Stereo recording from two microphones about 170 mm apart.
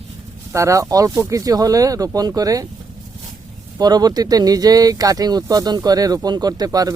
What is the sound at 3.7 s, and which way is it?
Speech, 25° right (ahead or behind).